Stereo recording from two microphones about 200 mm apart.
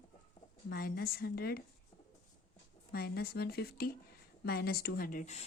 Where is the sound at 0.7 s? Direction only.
50° left (ahead or behind).